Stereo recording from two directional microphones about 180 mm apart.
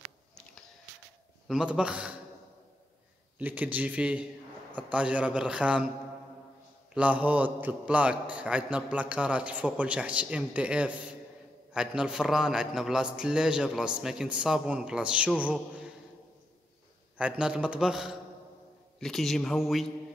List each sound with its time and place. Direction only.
1.5 s a man's voice: 5° right (ahead or behind)
3.3 s a man's voice: 10° right (ahead or behind)
6.9 s a man's voice: 5° right (ahead or behind)
17.2 s a man's voice: 5° right (ahead or behind)